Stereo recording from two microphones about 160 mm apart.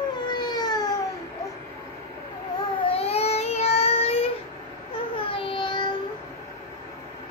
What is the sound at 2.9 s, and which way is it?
Child singing, 40° left (ahead or behind).